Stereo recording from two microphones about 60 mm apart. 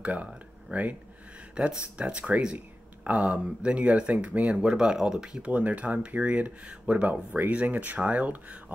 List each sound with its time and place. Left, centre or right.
0.0 s speech: right
0.3 s a sound: right
1.6 s speech: centre
4.6 s speech: centre
5.5 s speech: right